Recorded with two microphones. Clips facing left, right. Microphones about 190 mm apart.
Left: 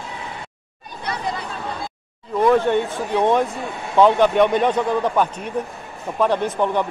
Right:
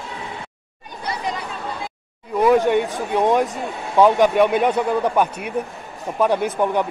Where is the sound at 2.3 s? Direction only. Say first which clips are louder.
Right 1 dB; 10° right (ahead or behind).